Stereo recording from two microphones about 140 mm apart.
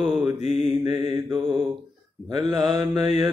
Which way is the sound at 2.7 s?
30° right (ahead or behind).